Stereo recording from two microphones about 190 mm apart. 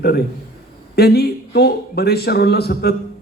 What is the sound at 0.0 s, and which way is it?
A man's voice, 55° left (ahead or behind).